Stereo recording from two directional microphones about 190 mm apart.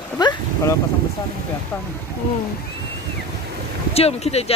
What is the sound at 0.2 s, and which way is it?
Speech, 20° left (ahead or behind).